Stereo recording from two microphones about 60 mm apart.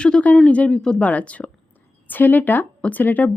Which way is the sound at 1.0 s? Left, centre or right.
Left.